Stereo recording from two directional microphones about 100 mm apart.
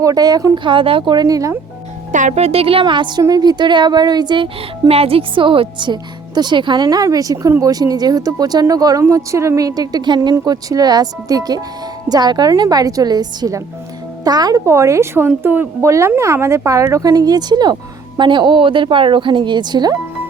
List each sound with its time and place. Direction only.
0.0 s speech: 40° right (ahead or behind)
0.6 s speech: 55° right (ahead or behind)
1.1 s speech: 40° right (ahead or behind)
2.3 s a woman's voice: 85° right; by 4.4 s 45° right (ahead or behind)
4.9 s a woman's voice: 75° right (ahead or behind); by 14.6 s 40° right (ahead or behind)
14.6 s a woman's voice: 30° right (ahead or behind)